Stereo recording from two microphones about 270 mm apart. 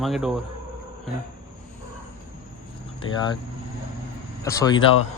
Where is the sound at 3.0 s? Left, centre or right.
Centre.